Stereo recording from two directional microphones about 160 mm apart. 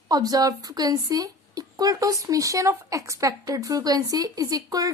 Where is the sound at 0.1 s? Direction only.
25° right (ahead or behind).